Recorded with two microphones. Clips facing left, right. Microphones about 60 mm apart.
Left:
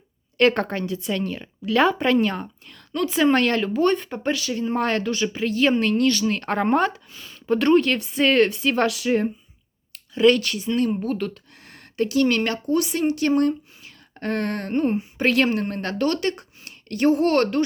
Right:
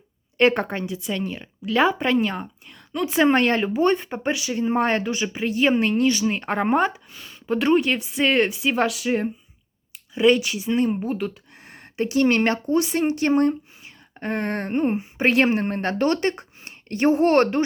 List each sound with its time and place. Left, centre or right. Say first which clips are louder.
0.3 s speech: even; centre
3.1 s speech: right 1 dB; right; by 9.3 s centre
9.9 s speech: left 1 dB; centre